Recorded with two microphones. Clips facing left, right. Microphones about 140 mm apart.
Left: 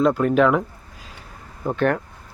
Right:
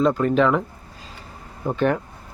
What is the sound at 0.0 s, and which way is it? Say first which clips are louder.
Speech: left 1 dB; 5° left (ahead or behind).